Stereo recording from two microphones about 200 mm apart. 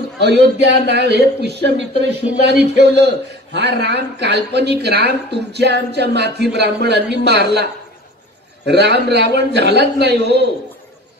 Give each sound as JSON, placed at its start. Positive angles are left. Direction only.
{"t": 0.2, "sound": "speech", "side_deg": -60}
{"t": 8.6, "sound": "speech", "side_deg": -55}